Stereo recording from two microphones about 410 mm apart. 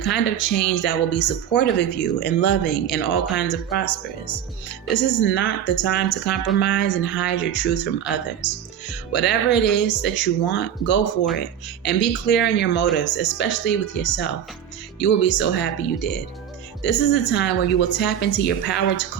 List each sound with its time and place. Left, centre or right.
0.0 s a woman's voice: left
4.9 s a woman's voice: left
17.3 s a woman's voice: left